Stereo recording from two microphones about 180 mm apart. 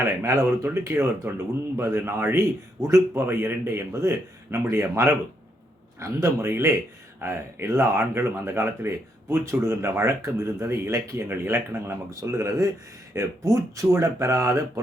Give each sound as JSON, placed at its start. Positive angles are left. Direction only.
{"t": 0.0, "sound": "a man's voice", "side_deg": -15}